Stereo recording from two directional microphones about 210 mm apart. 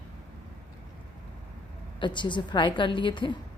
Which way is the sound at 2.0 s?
20° left (ahead or behind).